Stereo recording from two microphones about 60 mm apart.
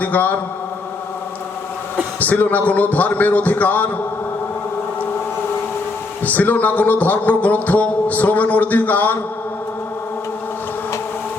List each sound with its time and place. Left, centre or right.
0.0 s speech: left
2.1 s speech: left
6.2 s speech: left